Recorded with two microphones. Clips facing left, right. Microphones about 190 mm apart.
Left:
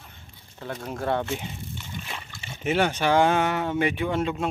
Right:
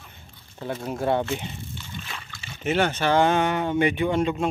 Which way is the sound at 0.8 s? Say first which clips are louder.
Right 3 dB; 10° right (ahead or behind).